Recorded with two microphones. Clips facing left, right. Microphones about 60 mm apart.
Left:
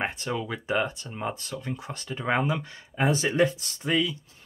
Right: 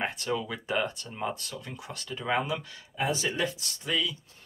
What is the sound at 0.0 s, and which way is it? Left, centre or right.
Speech, left.